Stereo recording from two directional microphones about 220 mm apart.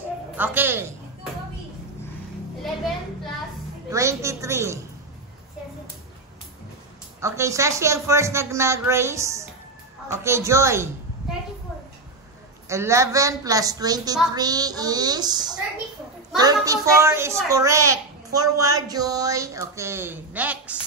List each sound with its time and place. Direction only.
0.4 s a child's voice: 10° right (ahead or behind)
3.9 s a sound: 15° right (ahead or behind)
7.2 s a child's voice: 15° right (ahead or behind)
12.6 s a child's voice: 15° right (ahead or behind)